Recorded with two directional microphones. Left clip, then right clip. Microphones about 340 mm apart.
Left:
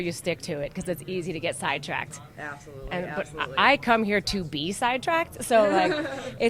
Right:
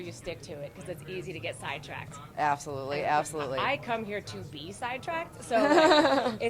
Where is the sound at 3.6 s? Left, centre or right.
Left.